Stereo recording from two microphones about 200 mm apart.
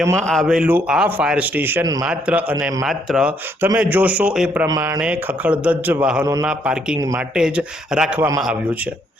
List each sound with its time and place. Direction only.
0.2 s a man's voice: 5° left (ahead or behind); by 2.0 s 15° right (ahead or behind)
2.0 s a man's voice: 5° right (ahead or behind)
4.6 s a man's voice: 15° right (ahead or behind)